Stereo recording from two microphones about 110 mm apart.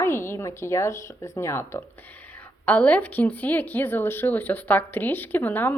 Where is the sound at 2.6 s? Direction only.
15° left (ahead or behind).